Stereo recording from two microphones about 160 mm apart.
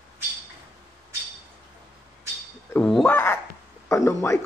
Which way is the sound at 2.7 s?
5° left (ahead or behind).